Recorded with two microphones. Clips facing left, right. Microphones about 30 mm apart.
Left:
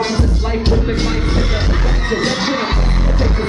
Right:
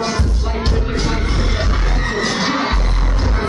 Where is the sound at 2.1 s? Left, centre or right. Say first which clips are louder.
Left 1 dB; centre.